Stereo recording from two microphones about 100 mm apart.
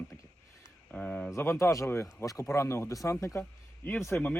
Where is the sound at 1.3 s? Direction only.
25° left (ahead or behind).